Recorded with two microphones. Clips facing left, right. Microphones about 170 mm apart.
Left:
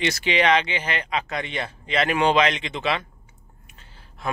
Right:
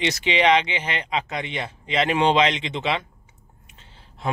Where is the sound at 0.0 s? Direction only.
20° right (ahead or behind).